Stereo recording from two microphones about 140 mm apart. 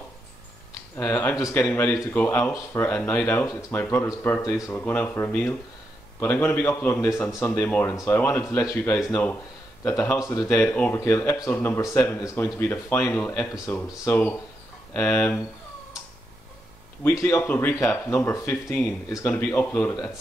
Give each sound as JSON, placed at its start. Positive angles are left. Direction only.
{"t": 0.9, "sound": "speech", "side_deg": 15}
{"t": 10.6, "sound": "speech", "side_deg": 10}
{"t": 17.0, "sound": "speech", "side_deg": 20}